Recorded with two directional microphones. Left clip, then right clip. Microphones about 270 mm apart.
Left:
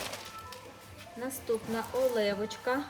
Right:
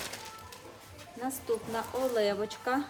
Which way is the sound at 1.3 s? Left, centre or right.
Centre.